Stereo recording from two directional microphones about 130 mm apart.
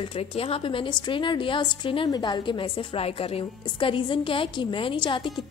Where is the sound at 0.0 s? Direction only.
45° left (ahead or behind).